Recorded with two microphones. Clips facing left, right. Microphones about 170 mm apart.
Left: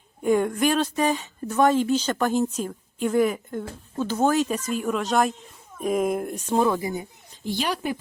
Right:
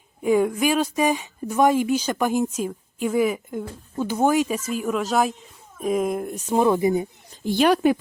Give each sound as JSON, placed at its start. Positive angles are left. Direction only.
{"t": 0.2, "sound": "speech", "side_deg": -5}
{"t": 6.7, "sound": "speech", "side_deg": -20}
{"t": 7.4, "sound": "a woman's voice", "side_deg": -55}